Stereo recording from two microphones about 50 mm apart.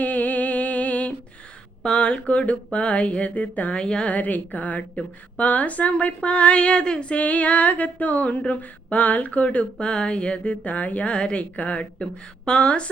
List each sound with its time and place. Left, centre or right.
0.0 s music: left
1.8 s speech: centre
2.7 s female singing: left
3.8 s a woman's voice: centre
4.1 s a woman's voice: left
4.9 s female singing: left
9.7 s female singing: centre